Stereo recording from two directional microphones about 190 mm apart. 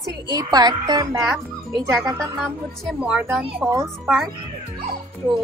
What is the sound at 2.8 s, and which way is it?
Speech, 5° right (ahead or behind).